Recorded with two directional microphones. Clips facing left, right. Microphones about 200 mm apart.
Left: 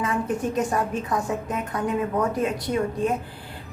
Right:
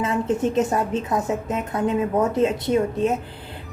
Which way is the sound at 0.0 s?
25° right (ahead or behind).